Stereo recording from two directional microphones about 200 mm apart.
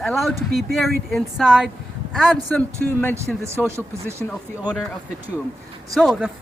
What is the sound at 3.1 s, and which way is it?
Speech, 15° right (ahead or behind).